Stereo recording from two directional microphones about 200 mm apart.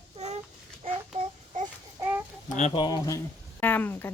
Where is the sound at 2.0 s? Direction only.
10° right (ahead or behind).